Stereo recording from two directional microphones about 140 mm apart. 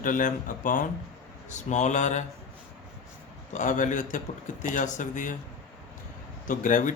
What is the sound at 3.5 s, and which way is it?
Speech, 65° left (ahead or behind).